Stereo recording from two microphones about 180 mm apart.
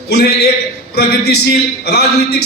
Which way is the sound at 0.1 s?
65° left (ahead or behind).